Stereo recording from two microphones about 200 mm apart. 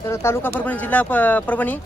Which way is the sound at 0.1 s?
10° left (ahead or behind).